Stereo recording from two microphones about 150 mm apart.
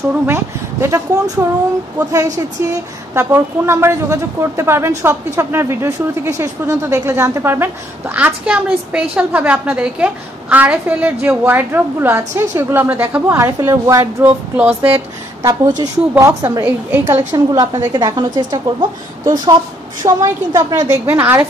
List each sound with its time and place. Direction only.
0.3 s a woman's voice: 15° right (ahead or behind)
15.4 s a woman's voice: 25° right (ahead or behind)
17.3 s a woman's voice: 25° right (ahead or behind)